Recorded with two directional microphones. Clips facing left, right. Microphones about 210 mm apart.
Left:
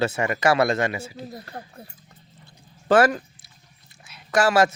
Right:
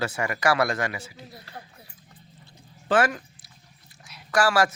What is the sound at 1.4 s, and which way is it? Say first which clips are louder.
Speech: left 6 dB; 45° left (ahead or behind).